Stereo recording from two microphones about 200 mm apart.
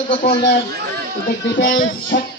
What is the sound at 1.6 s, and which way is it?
Speech, 60° left (ahead or behind).